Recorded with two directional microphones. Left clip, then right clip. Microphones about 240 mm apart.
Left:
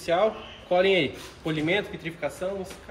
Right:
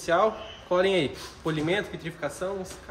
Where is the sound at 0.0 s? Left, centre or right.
Centre.